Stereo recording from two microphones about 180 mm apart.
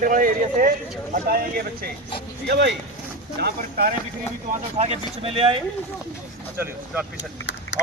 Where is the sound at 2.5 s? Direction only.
70° right (ahead or behind).